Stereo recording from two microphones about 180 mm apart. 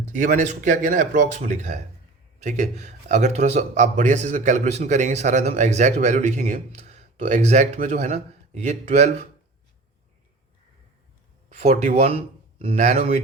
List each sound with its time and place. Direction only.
0.0 s speech: 45° right (ahead or behind)
11.4 s speech: 40° right (ahead or behind)